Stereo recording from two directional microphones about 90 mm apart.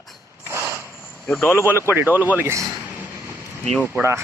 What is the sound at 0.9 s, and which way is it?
Cricket, 25° left (ahead or behind).